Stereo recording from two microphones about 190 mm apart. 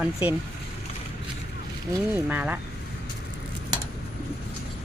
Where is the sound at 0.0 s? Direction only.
10° right (ahead or behind).